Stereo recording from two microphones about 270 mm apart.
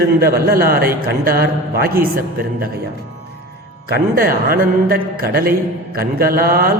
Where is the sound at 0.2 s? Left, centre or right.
Right.